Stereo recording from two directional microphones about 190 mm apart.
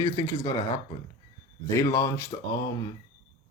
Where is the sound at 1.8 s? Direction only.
15° left (ahead or behind).